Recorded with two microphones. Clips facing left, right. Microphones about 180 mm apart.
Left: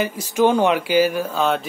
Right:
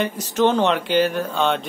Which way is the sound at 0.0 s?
10° left (ahead or behind).